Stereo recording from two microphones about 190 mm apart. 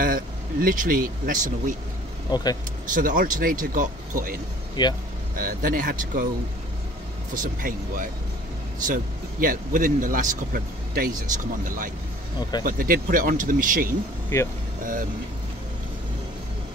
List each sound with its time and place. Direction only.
0.0 s speech: 45° right (ahead or behind)
2.3 s speech: 20° left (ahead or behind)
2.9 s speech: 45° right (ahead or behind)
4.8 s speech: 20° left (ahead or behind)
5.3 s speech: 45° right (ahead or behind)
7.3 s speech: 45° right (ahead or behind)
12.4 s speech: 20° left (ahead or behind)
12.6 s speech: 50° right (ahead or behind)
14.3 s speech: 15° left (ahead or behind)
14.8 s speech: 45° right (ahead or behind)